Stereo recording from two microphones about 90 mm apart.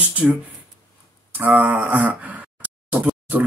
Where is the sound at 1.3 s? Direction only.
20° right (ahead or behind).